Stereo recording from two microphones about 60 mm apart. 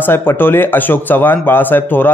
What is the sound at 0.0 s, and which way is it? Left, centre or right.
A man's voice, left.